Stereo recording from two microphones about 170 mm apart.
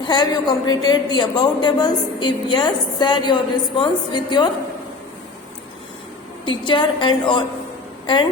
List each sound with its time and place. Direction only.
0.0 s a woman's voice: 25° left (ahead or behind)
6.4 s a woman's voice: 30° left (ahead or behind)